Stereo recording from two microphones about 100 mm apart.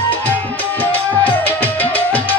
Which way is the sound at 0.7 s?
15° left (ahead or behind).